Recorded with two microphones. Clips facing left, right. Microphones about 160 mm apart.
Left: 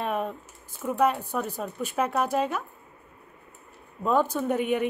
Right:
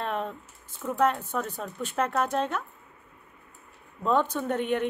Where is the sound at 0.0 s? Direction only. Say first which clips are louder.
Left 2 dB; 10° left (ahead or behind).